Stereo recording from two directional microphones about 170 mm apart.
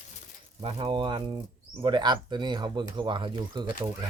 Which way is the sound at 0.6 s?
30° right (ahead or behind).